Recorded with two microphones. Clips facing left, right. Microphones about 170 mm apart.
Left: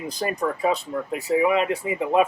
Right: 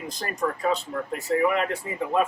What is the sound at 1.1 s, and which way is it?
Speech, 5° left (ahead or behind).